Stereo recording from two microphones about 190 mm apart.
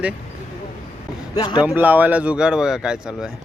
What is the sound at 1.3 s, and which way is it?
Speech, 20° left (ahead or behind).